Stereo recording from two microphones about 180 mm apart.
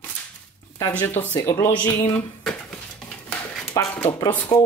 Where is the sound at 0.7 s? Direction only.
10° left (ahead or behind).